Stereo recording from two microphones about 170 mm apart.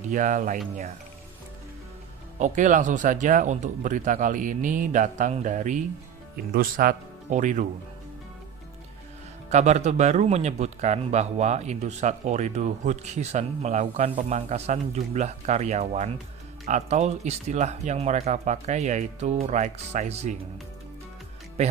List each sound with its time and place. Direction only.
0.1 s speech: 50° right (ahead or behind)
2.3 s speech: 45° right (ahead or behind)
6.5 s speech: 60° right (ahead or behind)
9.5 s speech: 40° right (ahead or behind)